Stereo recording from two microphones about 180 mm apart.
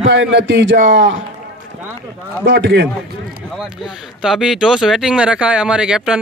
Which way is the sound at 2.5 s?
75° right (ahead or behind).